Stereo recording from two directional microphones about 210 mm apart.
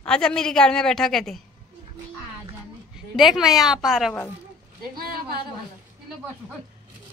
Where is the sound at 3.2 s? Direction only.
Centre (ahead or behind).